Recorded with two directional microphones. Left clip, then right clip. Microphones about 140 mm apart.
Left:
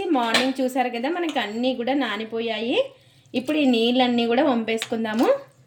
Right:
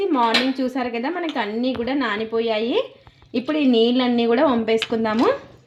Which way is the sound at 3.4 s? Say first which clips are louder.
Right 3 dB; 35° right (ahead or behind).